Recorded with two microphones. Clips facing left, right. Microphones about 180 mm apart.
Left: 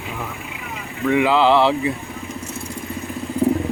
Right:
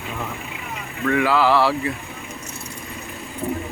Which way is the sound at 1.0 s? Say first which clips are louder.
Left 3 dB; 20° left (ahead or behind).